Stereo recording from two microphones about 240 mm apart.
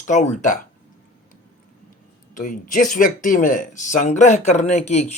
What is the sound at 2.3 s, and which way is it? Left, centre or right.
Speech, left.